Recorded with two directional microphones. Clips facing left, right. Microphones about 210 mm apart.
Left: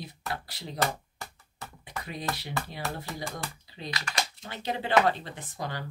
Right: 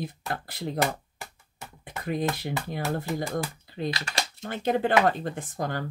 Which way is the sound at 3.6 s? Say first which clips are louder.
Right 9 dB; 50° right (ahead or behind).